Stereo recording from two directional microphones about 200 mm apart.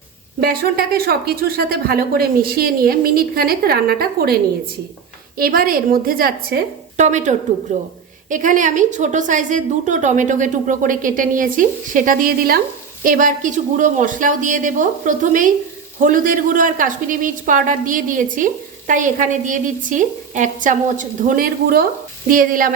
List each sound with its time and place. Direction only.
0.3 s speech: 50° right (ahead or behind)
5.4 s a woman's voice: 45° right (ahead or behind)